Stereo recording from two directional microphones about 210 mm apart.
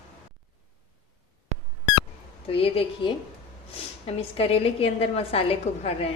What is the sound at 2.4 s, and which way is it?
A woman's voice, 25° left (ahead or behind).